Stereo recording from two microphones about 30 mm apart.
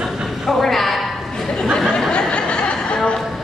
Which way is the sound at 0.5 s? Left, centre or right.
Centre.